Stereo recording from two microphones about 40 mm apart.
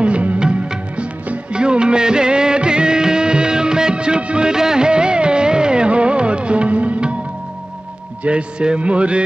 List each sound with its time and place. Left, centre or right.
0.0 s music: right
0.9 s music of bollywood: right
8.2 s speech: right